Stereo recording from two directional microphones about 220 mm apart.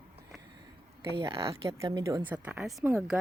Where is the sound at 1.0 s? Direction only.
20° right (ahead or behind).